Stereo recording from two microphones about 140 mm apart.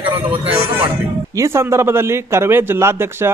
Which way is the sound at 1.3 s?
20° right (ahead or behind).